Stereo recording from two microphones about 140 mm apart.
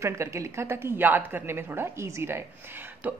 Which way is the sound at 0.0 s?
20° right (ahead or behind).